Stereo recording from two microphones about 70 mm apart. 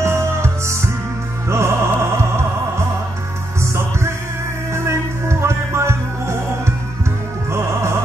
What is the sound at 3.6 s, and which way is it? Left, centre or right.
Music, right.